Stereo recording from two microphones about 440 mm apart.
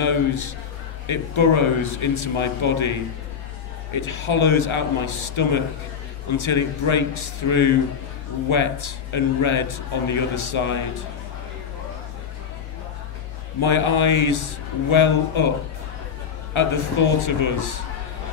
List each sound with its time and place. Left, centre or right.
0.0 s a man's voice: left
3.9 s a man's voice: left
13.6 s a man's voice: left
16.5 s a man's voice: left